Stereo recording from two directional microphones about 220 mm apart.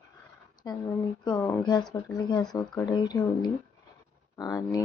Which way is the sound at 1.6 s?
20° left (ahead or behind).